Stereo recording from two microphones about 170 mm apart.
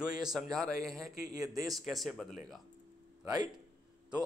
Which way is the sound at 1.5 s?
20° right (ahead or behind).